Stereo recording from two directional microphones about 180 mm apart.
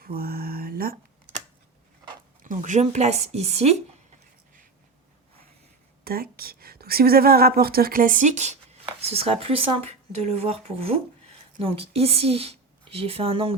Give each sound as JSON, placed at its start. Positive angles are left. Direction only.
{"t": 0.0, "sound": "a sound", "side_deg": -55}
{"t": 2.4, "sound": "speech", "side_deg": -45}
{"t": 6.1, "sound": "a woman's voice", "side_deg": -55}